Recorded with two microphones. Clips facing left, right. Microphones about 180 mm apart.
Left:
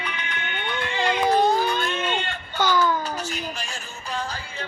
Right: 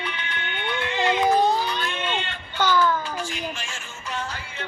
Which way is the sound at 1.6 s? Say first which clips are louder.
Left 3 dB; 45° left (ahead or behind).